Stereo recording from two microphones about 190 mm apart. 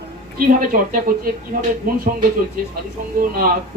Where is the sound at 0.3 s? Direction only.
50° right (ahead or behind).